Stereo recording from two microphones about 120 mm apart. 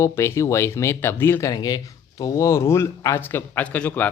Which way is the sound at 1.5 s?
35° left (ahead or behind).